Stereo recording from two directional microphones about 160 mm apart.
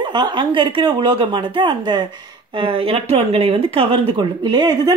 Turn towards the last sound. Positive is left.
turn(degrees=-25)  # may be behind; listen again after turning